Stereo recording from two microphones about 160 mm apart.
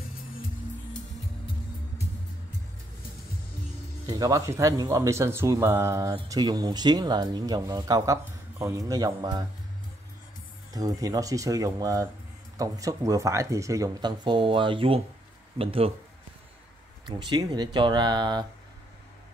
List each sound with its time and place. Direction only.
4.0 s speech: 20° right (ahead or behind)
10.7 s speech: 20° right (ahead or behind)
17.0 s speech: 30° right (ahead or behind)